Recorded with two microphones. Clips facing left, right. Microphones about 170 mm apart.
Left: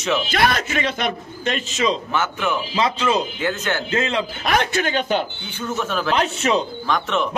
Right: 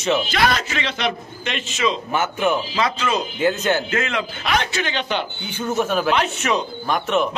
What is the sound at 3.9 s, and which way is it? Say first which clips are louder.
Speech: left 2 dB; 30° left (ahead or behind).